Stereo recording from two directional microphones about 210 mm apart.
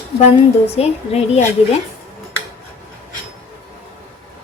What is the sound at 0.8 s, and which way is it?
Speech, 30° left (ahead or behind).